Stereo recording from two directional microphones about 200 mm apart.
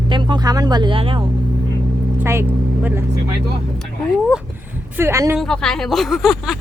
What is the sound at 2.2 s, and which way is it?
Speech, 15° right (ahead or behind).